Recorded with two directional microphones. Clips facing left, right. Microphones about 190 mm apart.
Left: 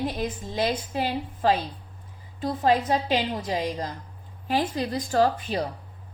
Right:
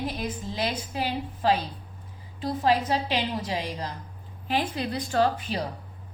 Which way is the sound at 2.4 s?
45° left (ahead or behind).